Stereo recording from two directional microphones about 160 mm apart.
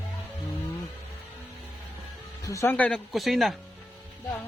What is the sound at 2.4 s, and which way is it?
Speech, 20° left (ahead or behind).